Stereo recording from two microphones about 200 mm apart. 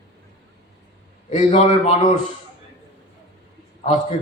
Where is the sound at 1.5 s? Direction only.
35° left (ahead or behind).